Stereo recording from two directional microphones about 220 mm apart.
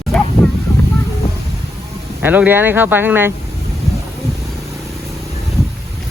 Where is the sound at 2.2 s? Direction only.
10° right (ahead or behind).